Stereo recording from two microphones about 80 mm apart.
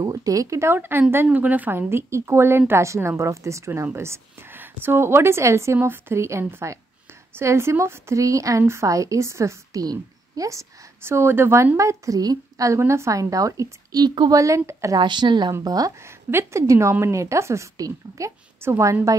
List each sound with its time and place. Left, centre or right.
0.0 s a woman's voice: right
14.0 s speech: right
14.3 s a woman's voice: right
15.0 s speech: right
15.6 s speech: right
16.3 s a woman's voice: right